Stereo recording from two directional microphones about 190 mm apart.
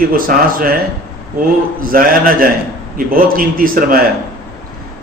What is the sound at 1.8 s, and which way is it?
A man's voice, 50° right (ahead or behind).